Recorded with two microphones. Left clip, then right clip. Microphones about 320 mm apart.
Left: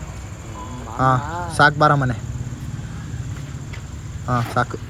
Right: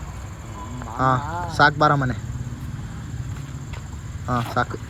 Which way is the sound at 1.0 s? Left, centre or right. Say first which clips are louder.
Left 2 dB; left.